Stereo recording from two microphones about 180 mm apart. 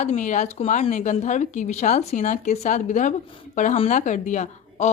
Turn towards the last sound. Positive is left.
turn(degrees=40)  # may be behind; listen again after turning